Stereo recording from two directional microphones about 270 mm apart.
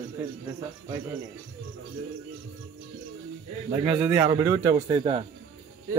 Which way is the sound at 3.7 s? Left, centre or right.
Centre.